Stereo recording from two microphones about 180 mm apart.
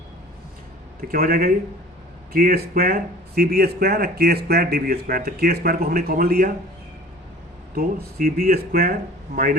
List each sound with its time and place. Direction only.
1.0 s speech: 55° right (ahead or behind)
7.8 s speech: 55° right (ahead or behind)